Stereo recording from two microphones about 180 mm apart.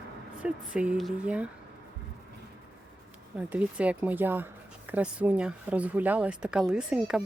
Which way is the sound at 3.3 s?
10° right (ahead or behind).